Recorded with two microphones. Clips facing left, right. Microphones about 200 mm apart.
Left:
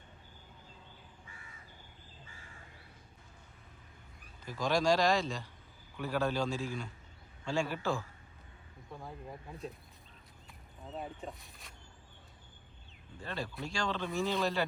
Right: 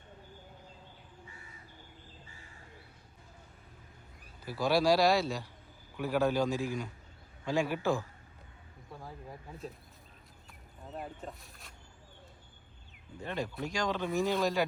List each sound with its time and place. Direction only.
4.4 s speech: 10° right (ahead or behind)
8.9 s speech: centre (ahead or behind)
10.9 s speech: centre (ahead or behind)
13.2 s speech: 15° right (ahead or behind)